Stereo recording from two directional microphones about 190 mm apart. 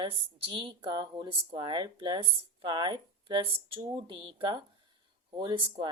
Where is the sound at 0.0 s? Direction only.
25° right (ahead or behind).